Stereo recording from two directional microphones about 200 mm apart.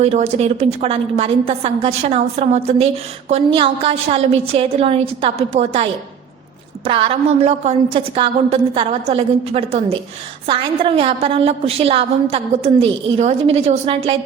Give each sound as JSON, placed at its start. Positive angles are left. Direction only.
{"t": 0.0, "sound": "a woman's voice", "side_deg": -35}